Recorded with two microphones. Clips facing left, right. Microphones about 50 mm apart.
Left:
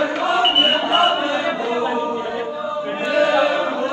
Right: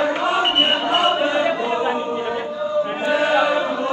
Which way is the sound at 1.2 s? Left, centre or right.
Right.